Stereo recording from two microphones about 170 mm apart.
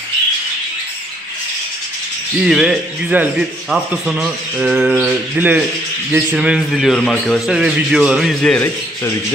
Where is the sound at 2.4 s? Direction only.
5° right (ahead or behind).